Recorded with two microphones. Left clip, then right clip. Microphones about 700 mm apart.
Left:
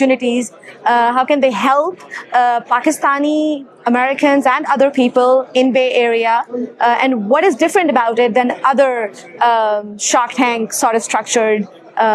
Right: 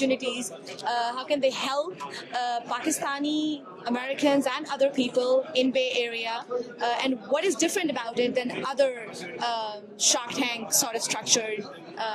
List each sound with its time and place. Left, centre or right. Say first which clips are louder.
0.1 s a woman's voice: left 13 dB; left